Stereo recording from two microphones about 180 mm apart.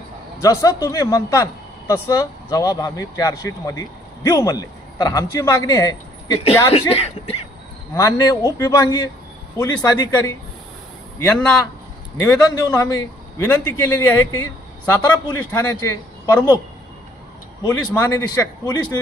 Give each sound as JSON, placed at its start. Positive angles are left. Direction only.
{"t": 0.4, "sound": "a man's voice", "side_deg": 20}
{"t": 7.9, "sound": "a man's voice", "side_deg": 20}
{"t": 11.3, "sound": "a man's voice", "side_deg": 5}
{"t": 12.2, "sound": "a man's voice", "side_deg": 20}
{"t": 17.6, "sound": "a man's voice", "side_deg": 20}